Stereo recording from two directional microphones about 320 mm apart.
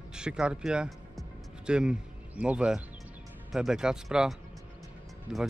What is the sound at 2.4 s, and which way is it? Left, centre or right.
Speech, centre.